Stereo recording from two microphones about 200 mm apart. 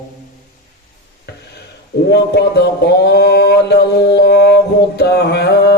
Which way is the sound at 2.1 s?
55° left (ahead or behind).